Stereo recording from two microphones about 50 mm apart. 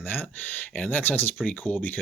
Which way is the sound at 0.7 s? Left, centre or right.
Left.